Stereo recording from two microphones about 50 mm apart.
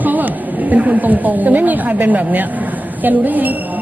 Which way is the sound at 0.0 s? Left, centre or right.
Right.